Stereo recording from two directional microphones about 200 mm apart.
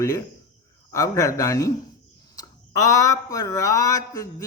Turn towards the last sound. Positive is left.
turn(degrees=15)  # may be behind; listen again after turning